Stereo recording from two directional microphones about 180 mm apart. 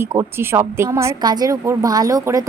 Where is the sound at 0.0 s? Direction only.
15° right (ahead or behind).